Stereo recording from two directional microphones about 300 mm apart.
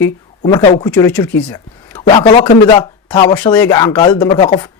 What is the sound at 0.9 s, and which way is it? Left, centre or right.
Speech, centre.